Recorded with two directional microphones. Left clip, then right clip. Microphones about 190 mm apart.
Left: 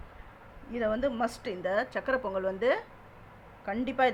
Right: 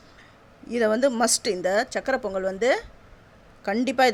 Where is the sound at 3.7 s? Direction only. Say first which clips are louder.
Right 7 dB; 45° right (ahead or behind).